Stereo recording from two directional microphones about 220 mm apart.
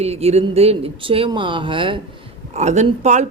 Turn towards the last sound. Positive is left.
turn(degrees=-30)  # may be behind; listen again after turning